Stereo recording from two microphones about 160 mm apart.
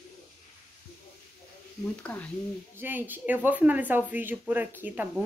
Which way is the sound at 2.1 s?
5° left (ahead or behind).